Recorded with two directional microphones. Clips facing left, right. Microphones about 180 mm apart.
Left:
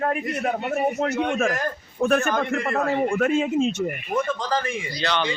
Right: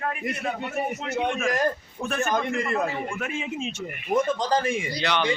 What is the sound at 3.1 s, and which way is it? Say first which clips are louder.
Speech: left 10 dB; 65° left (ahead or behind).